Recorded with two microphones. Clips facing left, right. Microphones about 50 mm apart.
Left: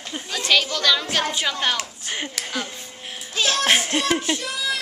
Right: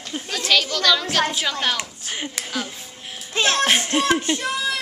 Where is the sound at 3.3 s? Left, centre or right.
Right.